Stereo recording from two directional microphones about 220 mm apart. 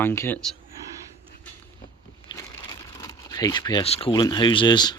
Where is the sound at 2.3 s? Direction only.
15° left (ahead or behind).